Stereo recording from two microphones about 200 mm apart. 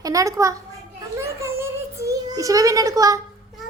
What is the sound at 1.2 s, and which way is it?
Child singing, 15° right (ahead or behind).